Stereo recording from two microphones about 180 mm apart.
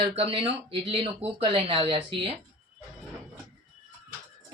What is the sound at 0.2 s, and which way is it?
Speech, 30° right (ahead or behind).